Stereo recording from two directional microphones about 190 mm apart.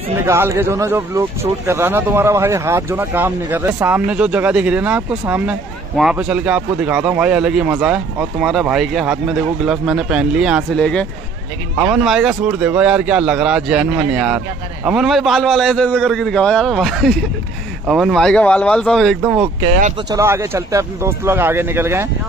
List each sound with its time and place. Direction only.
0.2 s speech: 15° right (ahead or behind)
20.1 s speech: 15° right (ahead or behind)